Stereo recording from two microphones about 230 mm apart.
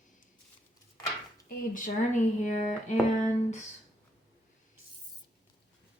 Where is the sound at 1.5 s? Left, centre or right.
Left.